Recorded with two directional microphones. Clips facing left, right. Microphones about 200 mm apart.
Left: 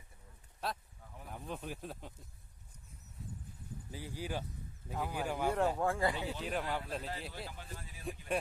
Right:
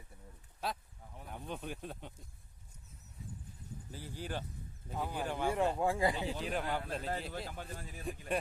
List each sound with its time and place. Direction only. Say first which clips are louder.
0.6 s a man's voice: right 1 dB; centre (ahead or behind)
3.9 s speech: left 1 dB; 10° left (ahead or behind)
5.8 s speech: right 1 dB; 15° right (ahead or behind)
6.2 s a man's voice: right 1 dB; centre (ahead or behind)
7.1 s speech: right 4 dB; 45° right (ahead or behind)